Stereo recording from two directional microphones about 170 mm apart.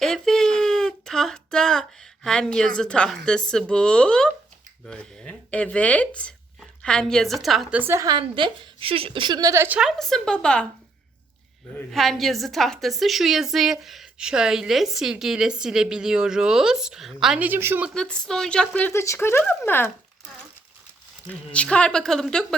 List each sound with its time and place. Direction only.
0.0 s a sound: 5° left (ahead or behind)
3.5 s a woman's voice: 5° left (ahead or behind); by 8.2 s 20° right (ahead or behind)
8.2 s a woman's voice: 30° right (ahead or behind); by 10.7 s 5° left (ahead or behind)
11.9 s a woman's voice: centre (ahead or behind)
17.9 s speech: 5° left (ahead or behind)
21.2 s a woman's voice: 5° left (ahead or behind)